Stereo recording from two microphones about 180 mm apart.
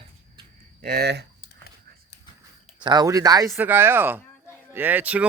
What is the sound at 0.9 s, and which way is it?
Speech, 65° right (ahead or behind).